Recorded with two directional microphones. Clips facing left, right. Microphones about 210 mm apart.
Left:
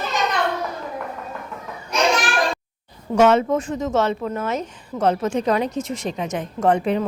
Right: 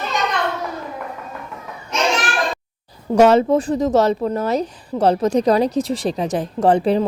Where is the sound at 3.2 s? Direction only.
35° right (ahead or behind).